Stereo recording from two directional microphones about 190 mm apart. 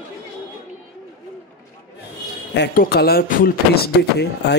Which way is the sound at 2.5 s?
55° left (ahead or behind).